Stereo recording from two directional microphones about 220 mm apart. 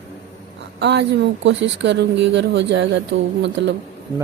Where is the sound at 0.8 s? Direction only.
50° right (ahead or behind).